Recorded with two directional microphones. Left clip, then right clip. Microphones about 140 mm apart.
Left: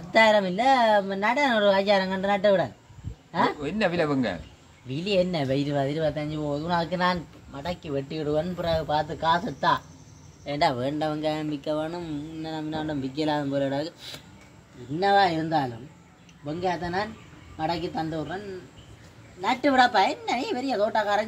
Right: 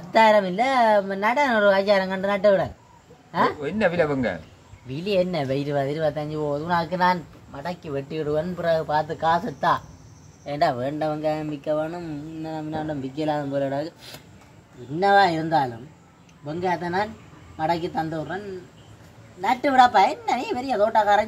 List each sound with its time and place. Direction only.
0.1 s speech: 15° left (ahead or behind)
3.6 s speech: 15° right (ahead or behind)
4.8 s speech: 20° left (ahead or behind)
15.0 s speech: 5° left (ahead or behind)
19.4 s speech: 15° left (ahead or behind)